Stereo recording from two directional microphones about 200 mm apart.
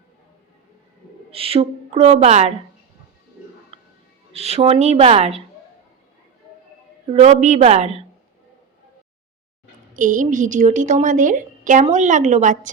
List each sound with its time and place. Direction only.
1.3 s a woman's voice: 30° right (ahead or behind)
3.7 s music: 30° right (ahead or behind)
4.3 s a woman's voice: 30° right (ahead or behind)
7.1 s a woman's voice: 30° right (ahead or behind)
9.9 s a woman's voice: 40° right (ahead or behind)